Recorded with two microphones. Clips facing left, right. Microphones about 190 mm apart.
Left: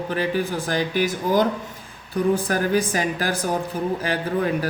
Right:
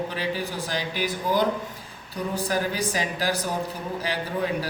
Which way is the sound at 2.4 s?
50° left (ahead or behind).